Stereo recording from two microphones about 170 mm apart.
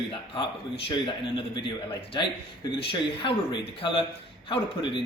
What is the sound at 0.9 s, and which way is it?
Speech, 30° left (ahead or behind).